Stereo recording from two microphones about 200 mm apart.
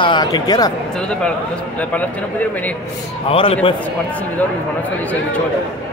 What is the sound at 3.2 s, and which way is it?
Speech, 25° left (ahead or behind).